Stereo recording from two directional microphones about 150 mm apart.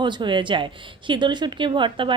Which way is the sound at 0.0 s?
30° right (ahead or behind).